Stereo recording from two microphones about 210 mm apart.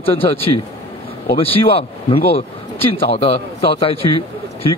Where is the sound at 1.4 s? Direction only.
25° left (ahead or behind).